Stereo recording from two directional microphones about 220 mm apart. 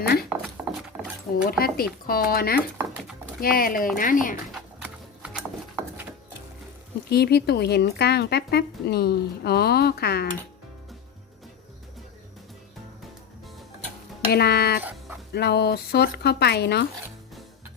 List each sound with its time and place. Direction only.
0.0 s speech: 45° left (ahead or behind)
0.3 s a sound: 5° right (ahead or behind)
1.5 s speech: 45° left (ahead or behind)
2.6 s a sound: 5° right (ahead or behind)
3.4 s speech: 40° left (ahead or behind)
4.5 s horse: centre (ahead or behind)
7.1 s speech: 45° left (ahead or behind)
14.3 s speech: 45° left (ahead or behind)
14.8 s dog: 5° right (ahead or behind)
15.3 s speech: 50° left (ahead or behind)